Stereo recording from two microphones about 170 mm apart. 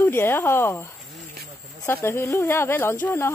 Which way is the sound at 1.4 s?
70° right (ahead or behind).